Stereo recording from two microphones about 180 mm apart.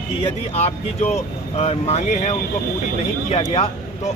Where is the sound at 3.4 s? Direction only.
35° left (ahead or behind).